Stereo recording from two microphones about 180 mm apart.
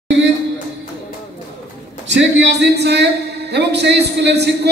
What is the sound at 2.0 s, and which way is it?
Speech, 75° right (ahead or behind).